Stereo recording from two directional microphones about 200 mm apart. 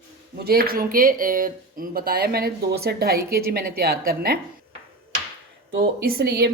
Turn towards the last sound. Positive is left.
turn(degrees=-50)  # may be behind; listen again after turning